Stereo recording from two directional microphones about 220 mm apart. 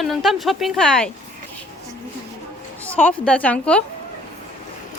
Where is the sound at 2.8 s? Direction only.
5° left (ahead or behind).